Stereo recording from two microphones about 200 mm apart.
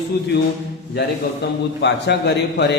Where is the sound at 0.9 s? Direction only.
55° left (ahead or behind).